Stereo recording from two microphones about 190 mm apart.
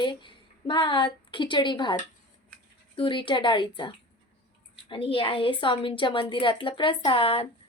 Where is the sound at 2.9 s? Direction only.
25° left (ahead or behind).